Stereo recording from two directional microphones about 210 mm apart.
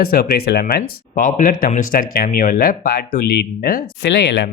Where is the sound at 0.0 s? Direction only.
45° left (ahead or behind).